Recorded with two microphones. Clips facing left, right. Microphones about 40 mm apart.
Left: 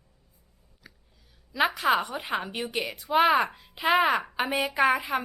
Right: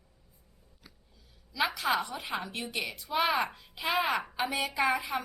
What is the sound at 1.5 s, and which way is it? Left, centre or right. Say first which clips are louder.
Speech: left 5 dB; left.